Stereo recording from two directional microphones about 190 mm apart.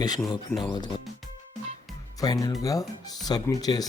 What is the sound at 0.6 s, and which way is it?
Speech, 20° left (ahead or behind).